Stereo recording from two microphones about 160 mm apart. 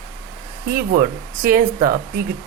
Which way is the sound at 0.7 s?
65° right (ahead or behind).